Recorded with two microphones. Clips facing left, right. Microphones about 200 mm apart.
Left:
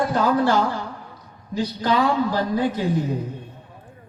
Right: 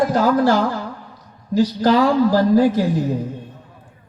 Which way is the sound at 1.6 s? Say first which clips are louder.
Right 5 dB; 90° right.